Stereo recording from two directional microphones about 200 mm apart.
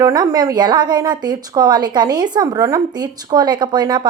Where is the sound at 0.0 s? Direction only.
20° right (ahead or behind).